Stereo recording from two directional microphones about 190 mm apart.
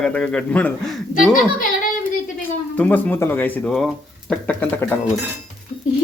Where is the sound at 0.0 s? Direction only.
5° left (ahead or behind).